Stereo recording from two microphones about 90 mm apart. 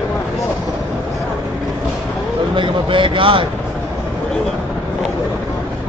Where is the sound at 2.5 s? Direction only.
65° right (ahead or behind).